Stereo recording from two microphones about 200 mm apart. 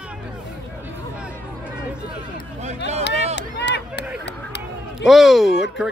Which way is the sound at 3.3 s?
60° left (ahead or behind).